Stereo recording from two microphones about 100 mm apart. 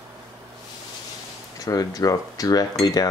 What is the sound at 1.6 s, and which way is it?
Speech, 35° left (ahead or behind).